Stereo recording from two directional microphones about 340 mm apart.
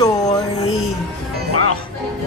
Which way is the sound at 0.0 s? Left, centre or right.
Centre.